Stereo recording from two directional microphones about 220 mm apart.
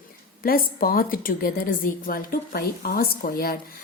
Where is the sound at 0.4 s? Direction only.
40° left (ahead or behind).